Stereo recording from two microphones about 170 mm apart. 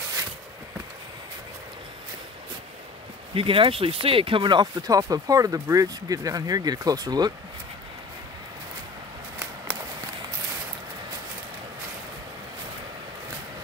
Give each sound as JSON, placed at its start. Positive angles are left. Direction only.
{"t": 3.3, "sound": "speech", "side_deg": -30}